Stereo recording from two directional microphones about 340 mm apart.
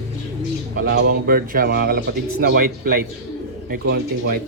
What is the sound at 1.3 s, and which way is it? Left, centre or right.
Speech, right.